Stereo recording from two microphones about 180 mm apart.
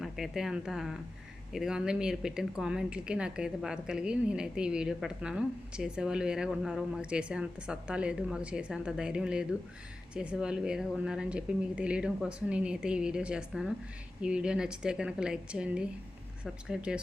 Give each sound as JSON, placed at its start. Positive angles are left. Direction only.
{"t": 0.0, "sound": "speech", "side_deg": 0}